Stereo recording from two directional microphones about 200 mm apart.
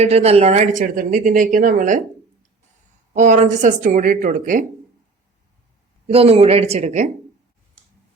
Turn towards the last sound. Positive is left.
turn(degrees=-35)  # may be behind; listen again after turning